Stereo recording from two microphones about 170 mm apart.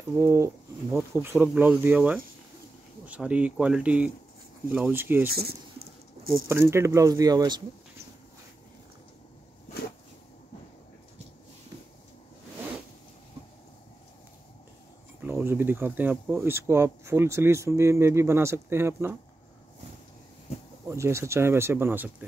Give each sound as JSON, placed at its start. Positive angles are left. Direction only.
{"t": 0.2, "sound": "speech", "side_deg": -20}
{"t": 5.3, "sound": "speech", "side_deg": -65}
{"t": 6.5, "sound": "speech", "side_deg": -15}
{"t": 15.2, "sound": "speech", "side_deg": -15}
{"t": 20.9, "sound": "speech", "side_deg": -15}